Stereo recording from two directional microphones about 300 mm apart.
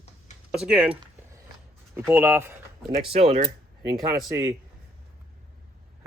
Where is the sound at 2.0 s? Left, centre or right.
Centre.